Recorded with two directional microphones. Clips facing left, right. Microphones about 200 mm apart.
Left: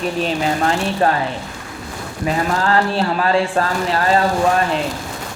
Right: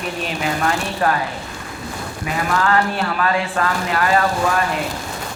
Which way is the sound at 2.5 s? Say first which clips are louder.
Right 2 dB; 30° left (ahead or behind).